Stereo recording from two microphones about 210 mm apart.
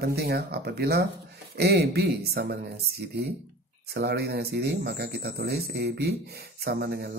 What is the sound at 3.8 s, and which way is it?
Speech, 50° right (ahead or behind).